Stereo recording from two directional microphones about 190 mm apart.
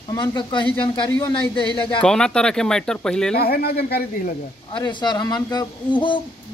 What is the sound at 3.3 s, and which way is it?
A man's voice, 55° left (ahead or behind).